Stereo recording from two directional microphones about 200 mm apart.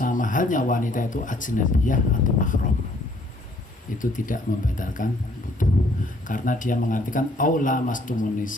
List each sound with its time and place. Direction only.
0.0 s speech: 40° left (ahead or behind)
3.9 s speech: 40° left (ahead or behind)
5.6 s a sound: 40° left (ahead or behind)
6.2 s speech: 40° left (ahead or behind)